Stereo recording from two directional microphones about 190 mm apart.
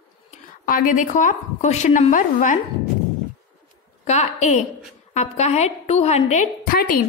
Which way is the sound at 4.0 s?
40° left (ahead or behind).